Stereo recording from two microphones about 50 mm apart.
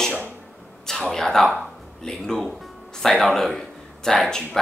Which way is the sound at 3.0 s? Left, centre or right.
Centre.